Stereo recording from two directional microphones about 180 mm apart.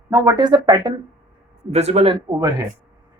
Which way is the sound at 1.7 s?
35° right (ahead or behind).